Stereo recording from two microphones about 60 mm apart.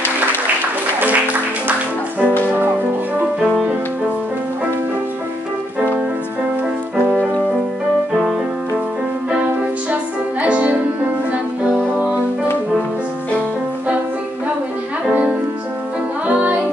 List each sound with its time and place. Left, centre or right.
0.9 s music: right
10.4 s music: right
16.3 s music: right